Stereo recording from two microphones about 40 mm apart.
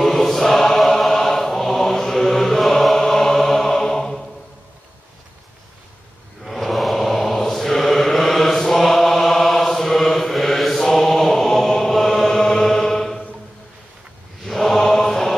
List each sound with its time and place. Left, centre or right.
0.0 s chant: centre
6.4 s mantra: centre
14.4 s mantra: centre